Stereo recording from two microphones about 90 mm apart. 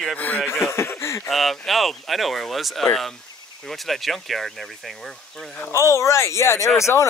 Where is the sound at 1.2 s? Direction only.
Centre (ahead or behind).